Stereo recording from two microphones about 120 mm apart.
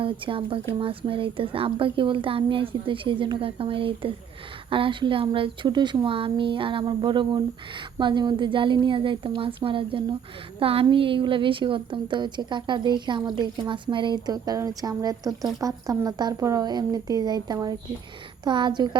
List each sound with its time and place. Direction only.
0.0 s a woman's voice: 50° right (ahead or behind)